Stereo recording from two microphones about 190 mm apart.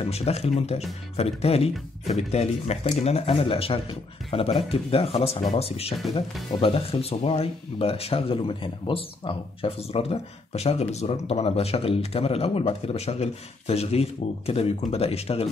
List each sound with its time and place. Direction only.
0.0 s speech: 35° left (ahead or behind)